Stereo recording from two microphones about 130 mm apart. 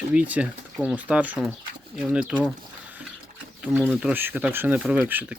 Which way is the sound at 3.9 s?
10° right (ahead or behind).